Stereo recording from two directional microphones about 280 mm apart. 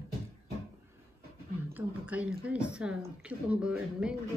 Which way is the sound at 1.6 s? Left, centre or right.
Centre.